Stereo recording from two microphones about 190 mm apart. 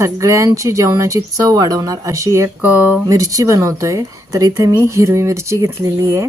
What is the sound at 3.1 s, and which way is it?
Speech, 20° right (ahead or behind).